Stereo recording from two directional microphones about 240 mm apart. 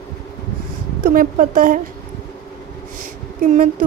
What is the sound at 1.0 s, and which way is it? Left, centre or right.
Speech, right.